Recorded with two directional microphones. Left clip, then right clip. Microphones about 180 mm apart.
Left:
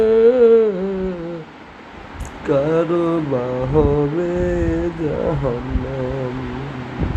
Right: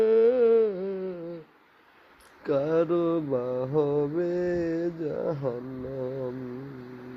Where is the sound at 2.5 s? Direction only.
55° right (ahead or behind).